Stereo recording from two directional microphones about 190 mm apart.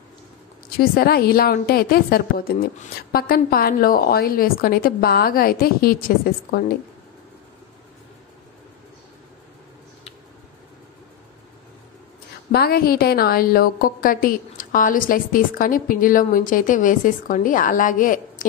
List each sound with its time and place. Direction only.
0.7 s a woman's voice: 55° left (ahead or behind)
12.5 s a woman's voice: 55° left (ahead or behind)